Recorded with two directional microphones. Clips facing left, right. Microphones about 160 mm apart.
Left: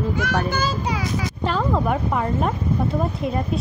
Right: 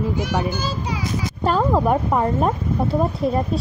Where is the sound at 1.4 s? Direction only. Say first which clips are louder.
Right 4 dB; 40° right (ahead or behind).